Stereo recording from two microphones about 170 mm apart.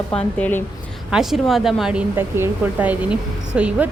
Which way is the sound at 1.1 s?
Centre (ahead or behind).